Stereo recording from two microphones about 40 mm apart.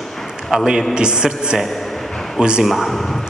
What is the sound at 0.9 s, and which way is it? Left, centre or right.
Speech, centre.